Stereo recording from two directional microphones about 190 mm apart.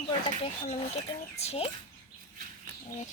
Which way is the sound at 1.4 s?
35° left (ahead or behind).